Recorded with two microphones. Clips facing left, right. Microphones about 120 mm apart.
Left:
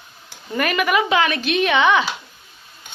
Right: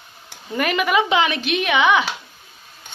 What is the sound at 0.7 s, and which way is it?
Speech, 15° right (ahead or behind).